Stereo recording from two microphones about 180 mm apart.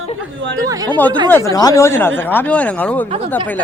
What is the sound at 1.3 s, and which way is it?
Speech, 20° left (ahead or behind).